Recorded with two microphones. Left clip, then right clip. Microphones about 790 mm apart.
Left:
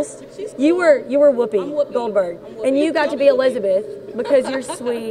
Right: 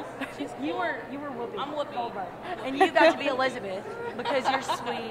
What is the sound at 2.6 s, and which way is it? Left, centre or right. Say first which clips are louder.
Speech: left 4 dB; left.